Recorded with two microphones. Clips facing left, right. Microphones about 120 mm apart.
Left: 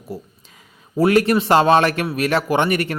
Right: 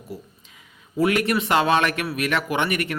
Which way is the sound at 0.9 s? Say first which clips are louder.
Left 5 dB; 35° left (ahead or behind).